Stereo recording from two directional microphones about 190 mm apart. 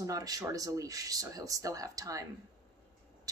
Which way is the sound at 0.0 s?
20° right (ahead or behind).